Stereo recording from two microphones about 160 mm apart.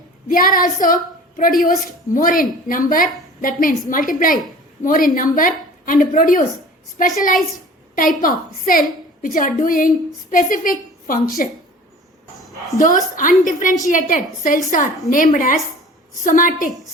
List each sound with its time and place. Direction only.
0.3 s a woman's voice: 60° left (ahead or behind)
12.8 s a woman's voice: 55° left (ahead or behind)